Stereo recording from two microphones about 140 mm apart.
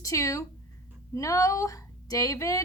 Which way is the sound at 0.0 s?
25° left (ahead or behind).